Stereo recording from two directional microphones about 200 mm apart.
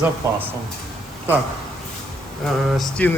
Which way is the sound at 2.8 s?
5° left (ahead or behind).